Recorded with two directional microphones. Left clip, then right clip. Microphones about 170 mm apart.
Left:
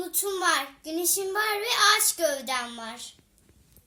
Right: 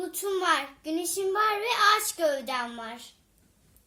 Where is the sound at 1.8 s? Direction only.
90° right.